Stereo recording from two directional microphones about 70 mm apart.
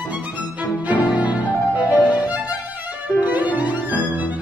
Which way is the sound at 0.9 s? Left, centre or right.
Right.